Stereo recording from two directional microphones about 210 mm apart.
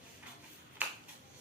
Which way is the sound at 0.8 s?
5° right (ahead or behind).